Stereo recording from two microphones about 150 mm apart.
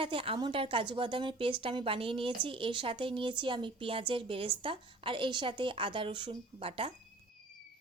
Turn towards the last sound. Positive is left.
turn(degrees=-35)  # may be behind; listen again after turning